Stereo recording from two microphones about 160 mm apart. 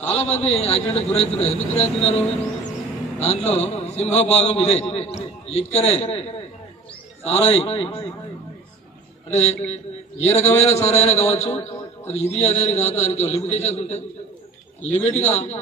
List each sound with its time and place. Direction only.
0.0 s a man's voice: 40° left (ahead or behind)
9.3 s a man's voice: 40° left (ahead or behind)
15.0 s a man's voice: 40° left (ahead or behind)